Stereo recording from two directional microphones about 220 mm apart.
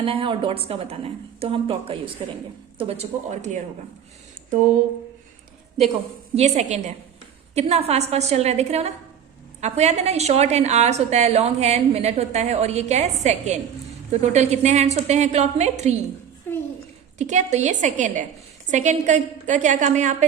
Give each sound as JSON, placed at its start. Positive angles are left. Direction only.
{"t": 0.0, "sound": "a woman's voice", "side_deg": -25}
{"t": 6.3, "sound": "a woman's voice", "side_deg": -30}
{"t": 16.5, "sound": "a child's voice", "side_deg": 10}
{"t": 17.2, "sound": "a woman's voice", "side_deg": -30}